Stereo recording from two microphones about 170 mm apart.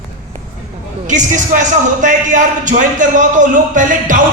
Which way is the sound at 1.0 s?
50° right (ahead or behind).